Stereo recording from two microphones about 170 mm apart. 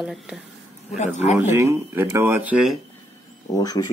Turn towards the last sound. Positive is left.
turn(degrees=20)  # may be behind; listen again after turning